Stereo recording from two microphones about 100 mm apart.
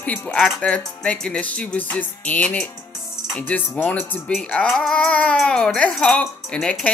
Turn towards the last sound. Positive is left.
turn(degrees=10)  # may be behind; listen again after turning